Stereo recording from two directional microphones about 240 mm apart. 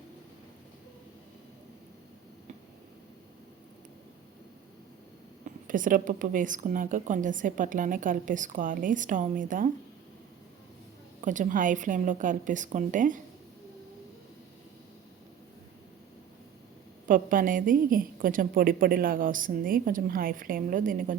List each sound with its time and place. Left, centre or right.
5.6 s a woman's voice: right
11.2 s a woman's voice: right
17.1 s a woman's voice: right